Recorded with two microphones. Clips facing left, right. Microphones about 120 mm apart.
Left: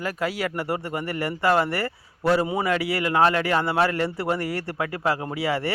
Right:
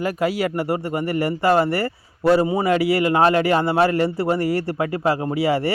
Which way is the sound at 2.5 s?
40° right (ahead or behind).